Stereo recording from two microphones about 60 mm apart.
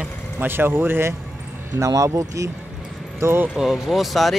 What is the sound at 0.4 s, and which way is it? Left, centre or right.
Speech, right.